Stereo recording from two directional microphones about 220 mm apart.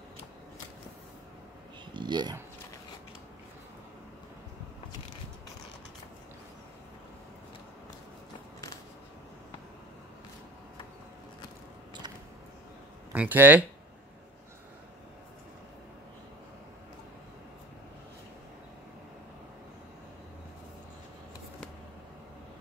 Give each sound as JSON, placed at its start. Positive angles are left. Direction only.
{"t": 2.0, "sound": "speech", "side_deg": -20}
{"t": 13.1, "sound": "speech", "side_deg": -10}